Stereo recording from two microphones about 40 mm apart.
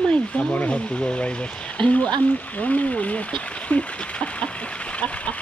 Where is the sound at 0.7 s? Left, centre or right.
Left.